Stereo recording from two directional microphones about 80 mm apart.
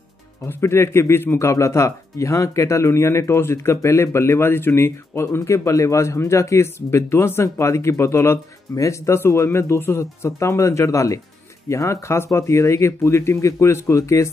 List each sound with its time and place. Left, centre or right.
0.5 s a man's voice: left